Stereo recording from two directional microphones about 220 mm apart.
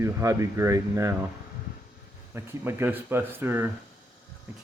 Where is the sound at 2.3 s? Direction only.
10° right (ahead or behind).